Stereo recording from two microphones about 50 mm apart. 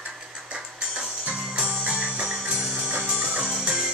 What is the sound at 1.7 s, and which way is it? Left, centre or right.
Music, right.